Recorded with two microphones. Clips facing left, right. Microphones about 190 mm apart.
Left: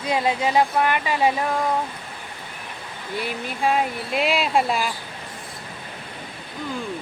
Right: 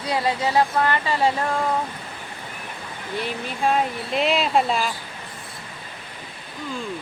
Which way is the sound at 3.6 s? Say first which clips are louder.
Even; 5° left (ahead or behind).